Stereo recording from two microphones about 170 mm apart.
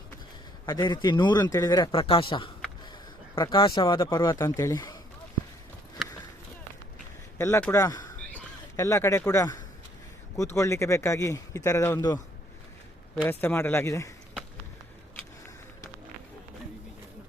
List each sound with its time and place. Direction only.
0.6 s speech: 25° left (ahead or behind)
7.3 s speech: 15° left (ahead or behind)
13.2 s speech: 15° left (ahead or behind)